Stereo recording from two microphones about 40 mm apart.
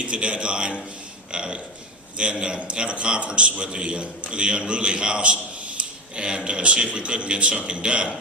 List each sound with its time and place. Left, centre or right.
0.0 s a man's voice: right